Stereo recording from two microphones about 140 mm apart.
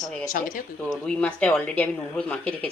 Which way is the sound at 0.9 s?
5° left (ahead or behind).